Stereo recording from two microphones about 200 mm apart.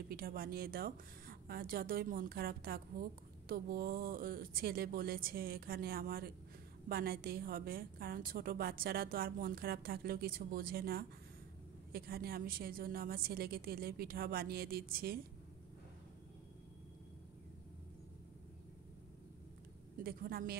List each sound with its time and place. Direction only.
0.1 s speech: 50° right (ahead or behind)
20.0 s speech: 50° right (ahead or behind)